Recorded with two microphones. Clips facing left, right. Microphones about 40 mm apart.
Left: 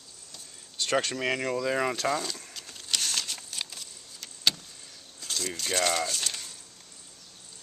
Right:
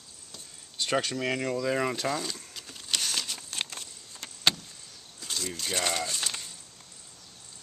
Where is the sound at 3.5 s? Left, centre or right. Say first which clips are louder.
Right 2 dB; right.